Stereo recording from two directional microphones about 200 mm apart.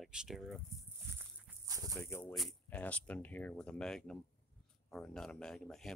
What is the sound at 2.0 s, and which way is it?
Speech, 10° left (ahead or behind).